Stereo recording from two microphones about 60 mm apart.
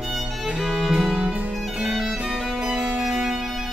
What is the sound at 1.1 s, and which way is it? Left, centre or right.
Music, right.